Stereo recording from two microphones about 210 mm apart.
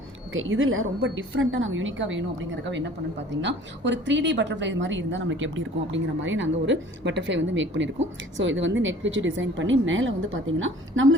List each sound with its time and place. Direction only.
0.3 s a woman's voice: 70° right (ahead or behind)